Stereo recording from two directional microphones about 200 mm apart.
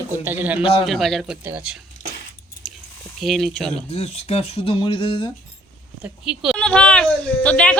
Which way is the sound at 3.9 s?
30° left (ahead or behind).